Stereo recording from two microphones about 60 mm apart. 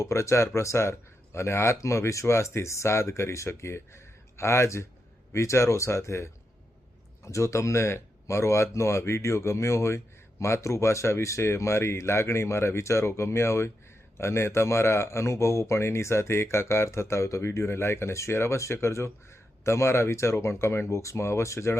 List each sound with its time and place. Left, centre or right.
0.0 s speech: left